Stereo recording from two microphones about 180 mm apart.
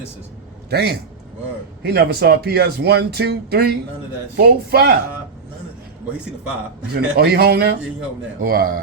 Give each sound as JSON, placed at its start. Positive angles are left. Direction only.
{"t": 0.7, "sound": "speech", "side_deg": -60}
{"t": 6.9, "sound": "speech", "side_deg": -60}